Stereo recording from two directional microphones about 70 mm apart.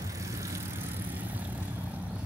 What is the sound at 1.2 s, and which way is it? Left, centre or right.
Vehicle, right.